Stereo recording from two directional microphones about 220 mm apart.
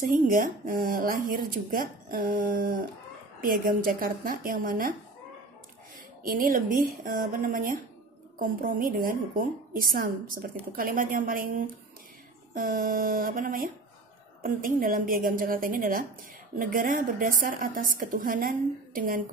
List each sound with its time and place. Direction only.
0.1 s speech: 40° right (ahead or behind)
6.2 s speech: 40° right (ahead or behind)